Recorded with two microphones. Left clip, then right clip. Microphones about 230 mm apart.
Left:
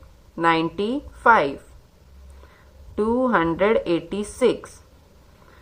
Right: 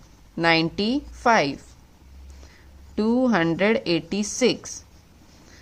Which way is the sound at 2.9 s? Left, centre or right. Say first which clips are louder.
Left 2 dB; right.